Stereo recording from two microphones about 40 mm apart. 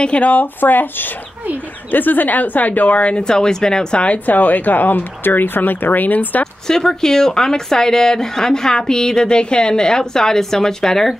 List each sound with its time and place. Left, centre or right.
0.2 s speech: left
3.3 s speech: centre
4.3 s speech: left
6.4 s speech: centre